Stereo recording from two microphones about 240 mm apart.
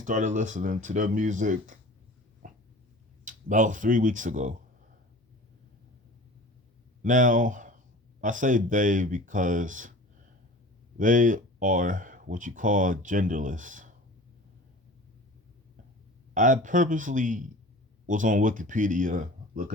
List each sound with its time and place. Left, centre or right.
0.0 s speech: right
2.4 s a sound: right
3.2 s speech: right
7.0 s speech: right
10.9 s speech: right
16.3 s speech: right